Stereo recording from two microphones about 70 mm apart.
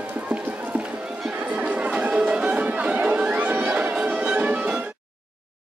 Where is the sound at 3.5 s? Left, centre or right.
Centre.